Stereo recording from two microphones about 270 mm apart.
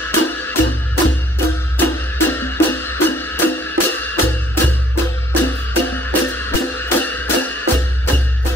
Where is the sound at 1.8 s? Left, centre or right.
Centre.